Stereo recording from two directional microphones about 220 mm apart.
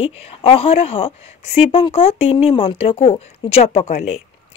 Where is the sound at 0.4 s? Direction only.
25° left (ahead or behind).